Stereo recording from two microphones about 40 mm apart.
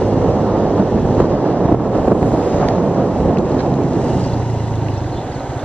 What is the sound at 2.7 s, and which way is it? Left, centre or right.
Vehicle, right.